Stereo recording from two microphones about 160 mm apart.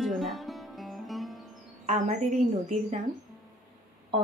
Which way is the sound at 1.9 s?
50° right (ahead or behind).